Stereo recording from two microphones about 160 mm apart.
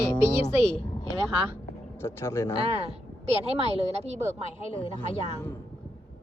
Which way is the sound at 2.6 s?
40° right (ahead or behind).